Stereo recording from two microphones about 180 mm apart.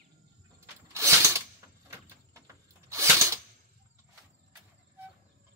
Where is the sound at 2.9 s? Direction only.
15° right (ahead or behind).